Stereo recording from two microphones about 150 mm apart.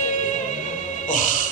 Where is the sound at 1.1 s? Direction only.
60° left (ahead or behind).